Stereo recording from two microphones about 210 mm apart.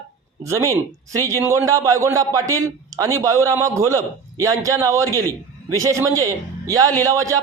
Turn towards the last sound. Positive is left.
turn(degrees=-15)  # may be behind; listen again after turning